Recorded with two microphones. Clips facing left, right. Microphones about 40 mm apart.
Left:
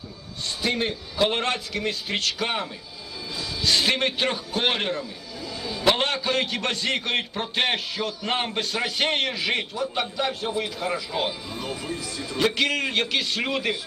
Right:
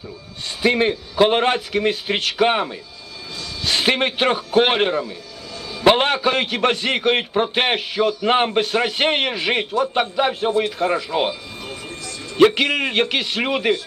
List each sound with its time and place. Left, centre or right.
0.6 s a man's voice: right
11.3 s a sound: centre
12.5 s a man's voice: right